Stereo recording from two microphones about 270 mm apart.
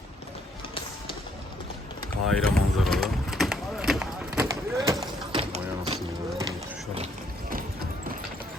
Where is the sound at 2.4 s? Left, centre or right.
Centre.